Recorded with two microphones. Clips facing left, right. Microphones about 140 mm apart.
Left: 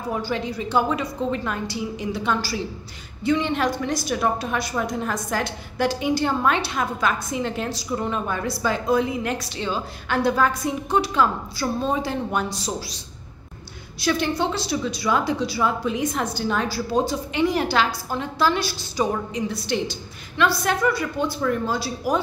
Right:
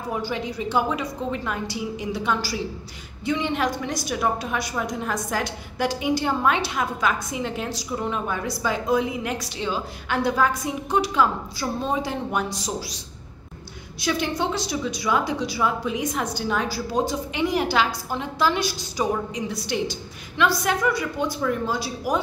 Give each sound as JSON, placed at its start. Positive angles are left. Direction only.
{"t": 0.1, "sound": "a woman's voice", "side_deg": -15}
{"t": 14.0, "sound": "a woman's voice", "side_deg": -15}